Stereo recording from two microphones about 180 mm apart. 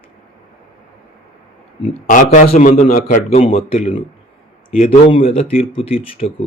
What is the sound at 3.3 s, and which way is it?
Speech, 35° left (ahead or behind).